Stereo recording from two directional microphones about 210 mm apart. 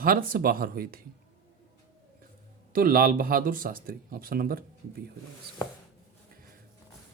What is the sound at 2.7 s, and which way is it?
Speech, 45° right (ahead or behind).